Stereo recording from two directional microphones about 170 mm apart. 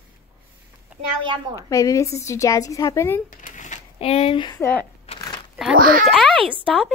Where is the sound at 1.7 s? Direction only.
20° left (ahead or behind).